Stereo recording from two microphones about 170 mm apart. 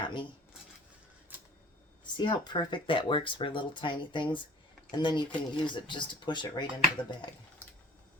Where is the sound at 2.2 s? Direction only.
25° left (ahead or behind).